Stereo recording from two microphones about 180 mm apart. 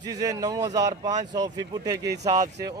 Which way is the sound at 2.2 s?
40° right (ahead or behind).